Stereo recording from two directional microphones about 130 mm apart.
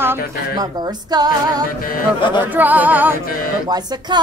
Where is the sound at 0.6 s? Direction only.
30° right (ahead or behind).